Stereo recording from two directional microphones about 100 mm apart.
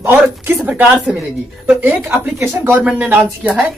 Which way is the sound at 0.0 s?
25° right (ahead or behind).